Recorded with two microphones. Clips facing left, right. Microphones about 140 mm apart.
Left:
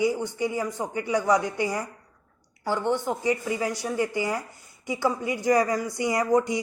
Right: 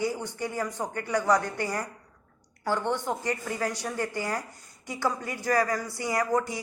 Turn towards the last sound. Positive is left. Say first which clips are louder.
# left 4 dB
turn(degrees=20)  # may be behind; listen again after turning